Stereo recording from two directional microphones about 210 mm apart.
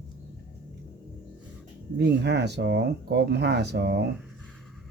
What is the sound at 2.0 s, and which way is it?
Speech, 55° right (ahead or behind).